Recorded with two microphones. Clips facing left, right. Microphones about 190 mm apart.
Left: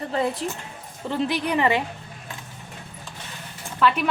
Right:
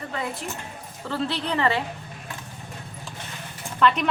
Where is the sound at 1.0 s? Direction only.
15° left (ahead or behind).